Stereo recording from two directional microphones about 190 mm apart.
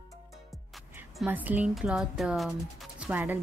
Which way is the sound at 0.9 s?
10° right (ahead or behind).